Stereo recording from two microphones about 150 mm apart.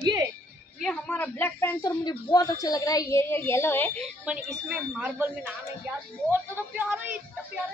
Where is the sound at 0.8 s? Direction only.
5° left (ahead or behind).